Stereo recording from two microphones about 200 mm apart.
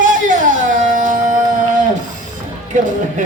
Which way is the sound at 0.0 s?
40° right (ahead or behind).